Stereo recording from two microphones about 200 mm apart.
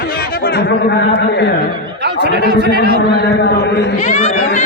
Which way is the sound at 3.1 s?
55° left (ahead or behind).